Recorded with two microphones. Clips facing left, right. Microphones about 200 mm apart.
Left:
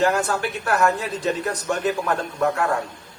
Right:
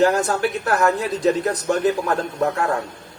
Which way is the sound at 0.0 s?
40° right (ahead or behind).